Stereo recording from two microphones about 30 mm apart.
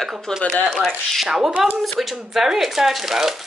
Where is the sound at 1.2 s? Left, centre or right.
Centre.